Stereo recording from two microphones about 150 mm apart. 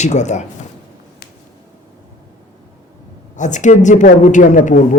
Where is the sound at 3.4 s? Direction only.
55° left (ahead or behind).